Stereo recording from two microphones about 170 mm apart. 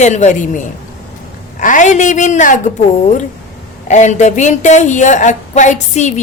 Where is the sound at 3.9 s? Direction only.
45° left (ahead or behind).